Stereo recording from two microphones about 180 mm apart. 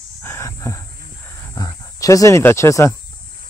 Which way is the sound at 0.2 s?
15° left (ahead or behind).